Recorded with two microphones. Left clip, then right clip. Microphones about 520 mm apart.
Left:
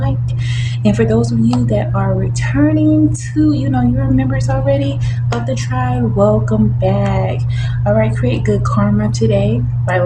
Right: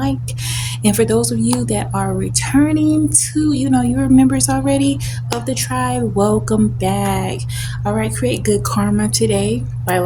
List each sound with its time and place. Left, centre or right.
0.8 s speech: right
3.4 s a sound: right
5.3 s speech: right